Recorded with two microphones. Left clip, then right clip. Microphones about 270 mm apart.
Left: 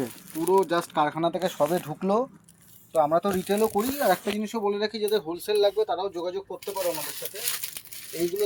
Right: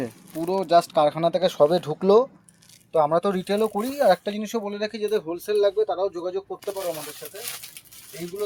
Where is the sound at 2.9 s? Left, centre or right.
Right.